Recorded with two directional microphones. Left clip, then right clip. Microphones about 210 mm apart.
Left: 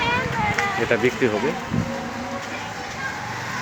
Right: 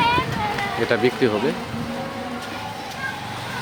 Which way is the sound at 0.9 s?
10° right (ahead or behind).